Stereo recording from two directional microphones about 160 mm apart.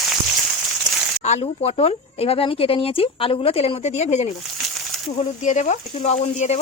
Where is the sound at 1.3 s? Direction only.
40° left (ahead or behind).